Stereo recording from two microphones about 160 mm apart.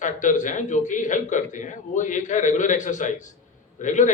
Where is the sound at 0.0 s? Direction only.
50° left (ahead or behind).